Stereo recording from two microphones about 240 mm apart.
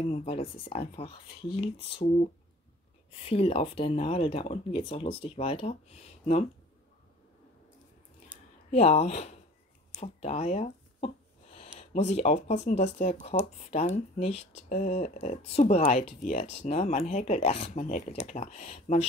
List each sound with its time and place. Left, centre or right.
0.1 s speech: left
3.2 s speech: left
8.7 s speech: left